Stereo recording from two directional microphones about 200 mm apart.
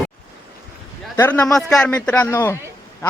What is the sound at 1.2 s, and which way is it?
A man's voice, 10° left (ahead or behind).